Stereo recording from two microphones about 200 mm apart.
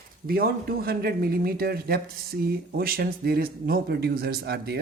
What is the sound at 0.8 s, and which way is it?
Speech, 50° right (ahead or behind).